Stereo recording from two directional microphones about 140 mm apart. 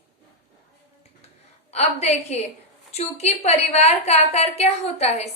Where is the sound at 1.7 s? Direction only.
50° left (ahead or behind).